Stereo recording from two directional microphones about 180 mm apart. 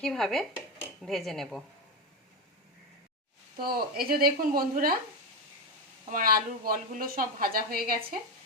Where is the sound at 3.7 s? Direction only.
55° right (ahead or behind).